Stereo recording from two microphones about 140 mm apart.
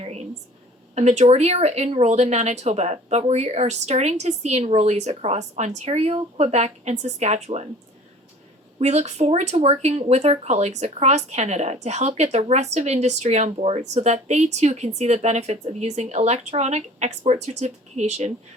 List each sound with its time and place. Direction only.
0.0 s a sound: 50° right (ahead or behind)
0.9 s speech: 55° right (ahead or behind)
8.8 s speech: 50° right (ahead or behind)